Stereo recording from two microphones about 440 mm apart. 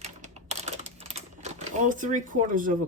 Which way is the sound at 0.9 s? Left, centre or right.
Centre.